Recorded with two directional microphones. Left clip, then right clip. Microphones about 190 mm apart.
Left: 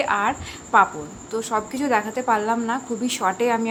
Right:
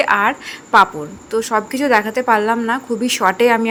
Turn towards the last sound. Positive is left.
turn(degrees=-30)  # may be behind; listen again after turning